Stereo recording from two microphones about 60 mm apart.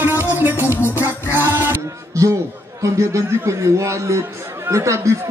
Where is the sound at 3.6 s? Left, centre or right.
Right.